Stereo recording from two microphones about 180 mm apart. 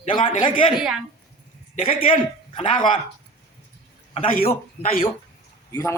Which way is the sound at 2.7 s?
45° left (ahead or behind).